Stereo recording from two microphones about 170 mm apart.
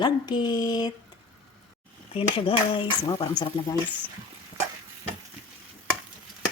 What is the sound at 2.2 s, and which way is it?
Speech, 30° left (ahead or behind).